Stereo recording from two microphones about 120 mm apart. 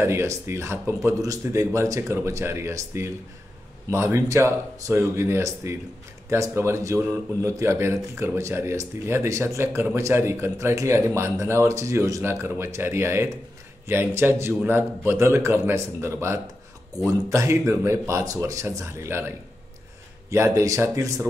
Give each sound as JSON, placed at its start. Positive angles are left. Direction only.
{"t": 0.0, "sound": "a man's voice", "side_deg": -20}